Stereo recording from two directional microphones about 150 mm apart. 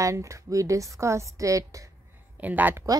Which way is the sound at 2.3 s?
10° right (ahead or behind).